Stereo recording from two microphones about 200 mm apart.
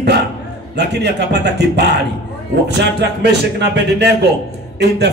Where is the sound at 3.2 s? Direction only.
55° right (ahead or behind).